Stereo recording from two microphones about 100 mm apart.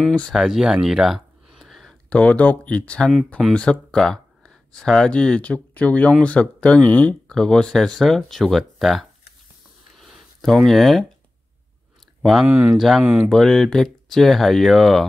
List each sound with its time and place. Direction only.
0.3 s a sound: 5° right (ahead or behind)
2.0 s speech: 15° left (ahead or behind)
9.9 s a sound: 5° left (ahead or behind)
12.2 s speech: centre (ahead or behind)
13.0 s speech: 15° right (ahead or behind)
13.3 s speech: 5° left (ahead or behind)